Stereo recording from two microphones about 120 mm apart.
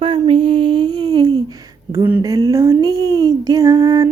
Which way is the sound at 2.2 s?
30° right (ahead or behind).